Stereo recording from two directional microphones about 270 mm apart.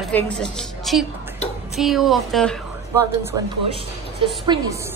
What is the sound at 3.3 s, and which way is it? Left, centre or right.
Speech, centre.